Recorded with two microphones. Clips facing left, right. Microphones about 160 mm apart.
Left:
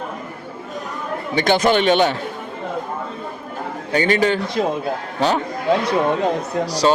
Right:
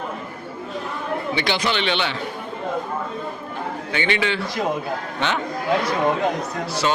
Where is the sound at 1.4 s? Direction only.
45° left (ahead or behind).